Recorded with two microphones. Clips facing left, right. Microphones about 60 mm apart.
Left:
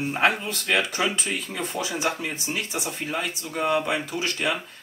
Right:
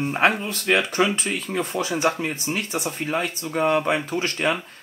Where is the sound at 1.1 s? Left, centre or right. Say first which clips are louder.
Right 4 dB; right.